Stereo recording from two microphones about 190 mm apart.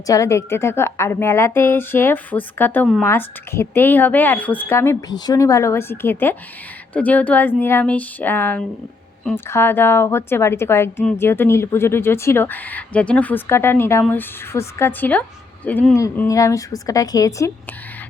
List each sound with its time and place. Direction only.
0.1 s a woman's voice: 15° left (ahead or behind)